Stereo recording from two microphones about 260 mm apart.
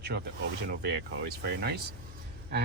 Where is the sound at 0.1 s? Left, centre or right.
Right.